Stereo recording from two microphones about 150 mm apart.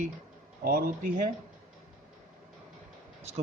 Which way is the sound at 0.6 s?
90° right.